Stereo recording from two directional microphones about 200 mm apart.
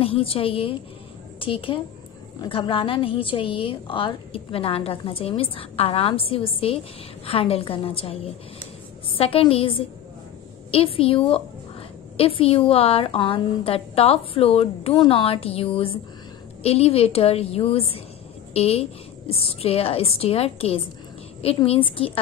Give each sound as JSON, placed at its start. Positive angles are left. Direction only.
{"t": 0.0, "sound": "a woman's voice", "side_deg": 30}